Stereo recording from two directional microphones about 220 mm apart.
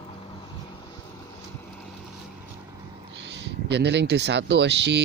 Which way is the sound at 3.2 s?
50° right (ahead or behind).